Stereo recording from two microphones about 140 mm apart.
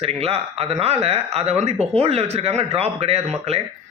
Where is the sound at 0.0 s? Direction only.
45° right (ahead or behind).